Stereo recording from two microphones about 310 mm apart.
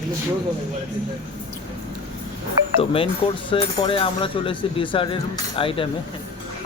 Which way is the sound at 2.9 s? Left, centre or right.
Centre.